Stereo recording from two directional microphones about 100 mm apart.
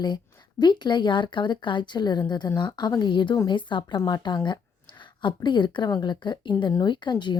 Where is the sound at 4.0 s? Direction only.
40° left (ahead or behind).